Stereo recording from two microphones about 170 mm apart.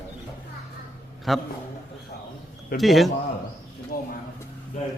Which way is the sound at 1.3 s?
Centre (ahead or behind).